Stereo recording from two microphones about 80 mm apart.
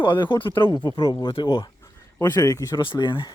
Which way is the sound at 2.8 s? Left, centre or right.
Left.